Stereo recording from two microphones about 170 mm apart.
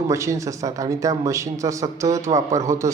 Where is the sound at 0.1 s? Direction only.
20° right (ahead or behind).